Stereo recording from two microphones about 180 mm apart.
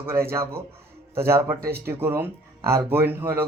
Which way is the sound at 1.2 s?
15° right (ahead or behind).